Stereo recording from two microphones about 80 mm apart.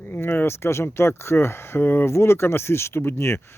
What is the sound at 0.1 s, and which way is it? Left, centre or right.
Speech, left.